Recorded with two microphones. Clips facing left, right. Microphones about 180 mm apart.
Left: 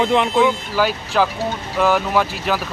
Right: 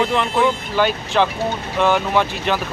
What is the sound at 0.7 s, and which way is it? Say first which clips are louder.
Speech: right 1 dB; 5° left (ahead or behind).